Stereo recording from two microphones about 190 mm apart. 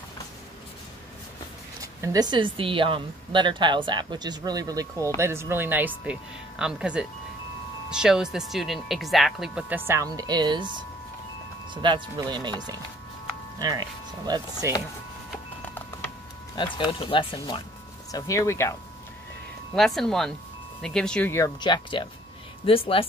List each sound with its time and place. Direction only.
1.8 s speech: 20° right (ahead or behind)
11.7 s speech: 25° right (ahead or behind)
16.5 s speech: 25° left (ahead or behind)
19.7 s speech: centre (ahead or behind)
21.5 s speech: 25° left (ahead or behind)